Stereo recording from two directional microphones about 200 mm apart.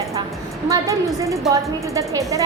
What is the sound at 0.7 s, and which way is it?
A woman's voice, 15° right (ahead or behind).